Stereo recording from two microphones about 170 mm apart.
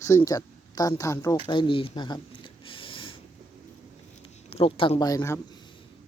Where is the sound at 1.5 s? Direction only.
30° left (ahead or behind).